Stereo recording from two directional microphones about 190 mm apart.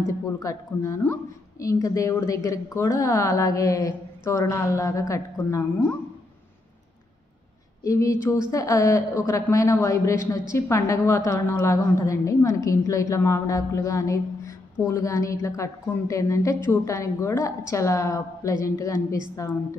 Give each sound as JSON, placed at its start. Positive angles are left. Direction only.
{"t": 0.4, "sound": "a woman's voice", "side_deg": 15}
{"t": 7.8, "sound": "a woman's voice", "side_deg": 15}